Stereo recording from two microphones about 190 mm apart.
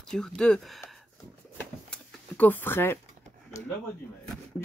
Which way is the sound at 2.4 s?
10° left (ahead or behind).